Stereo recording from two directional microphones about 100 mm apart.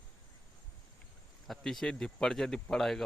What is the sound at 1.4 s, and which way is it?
Speech, 5° left (ahead or behind).